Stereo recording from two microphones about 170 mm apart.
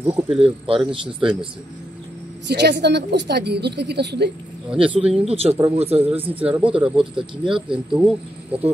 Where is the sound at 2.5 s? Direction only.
75° right (ahead or behind).